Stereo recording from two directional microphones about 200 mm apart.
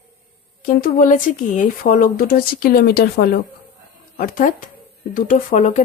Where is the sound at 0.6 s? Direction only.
45° left (ahead or behind).